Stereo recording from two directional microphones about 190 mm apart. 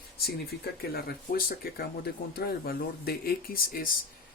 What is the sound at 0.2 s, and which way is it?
Speech, 55° left (ahead or behind).